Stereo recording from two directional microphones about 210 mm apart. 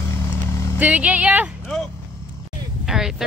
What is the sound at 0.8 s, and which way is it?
Speech, 5° right (ahead or behind).